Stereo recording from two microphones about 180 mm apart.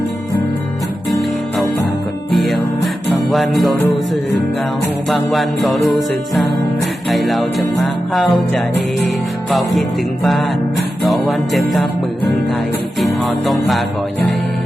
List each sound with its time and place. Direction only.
2.3 s music: centre (ahead or behind)
5.0 s music: centre (ahead or behind)
7.1 s music: centre (ahead or behind)
11.1 s music: centre (ahead or behind)
13.2 s music: centre (ahead or behind)